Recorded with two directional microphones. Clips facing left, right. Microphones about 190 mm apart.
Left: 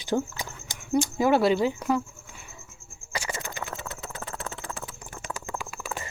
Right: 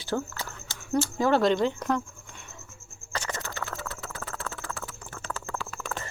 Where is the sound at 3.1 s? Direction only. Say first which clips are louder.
Left 1 dB; 10° left (ahead or behind).